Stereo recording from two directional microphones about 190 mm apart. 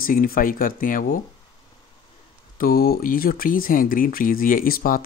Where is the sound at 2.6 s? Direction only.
50° left (ahead or behind).